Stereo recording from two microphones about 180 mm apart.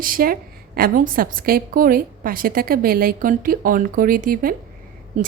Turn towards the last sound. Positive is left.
turn(degrees=-40)  # may be behind; listen again after turning